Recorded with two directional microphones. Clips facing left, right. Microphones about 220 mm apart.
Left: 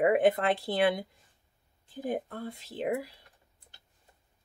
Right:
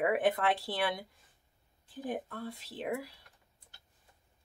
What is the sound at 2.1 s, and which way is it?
Speech, 40° left (ahead or behind).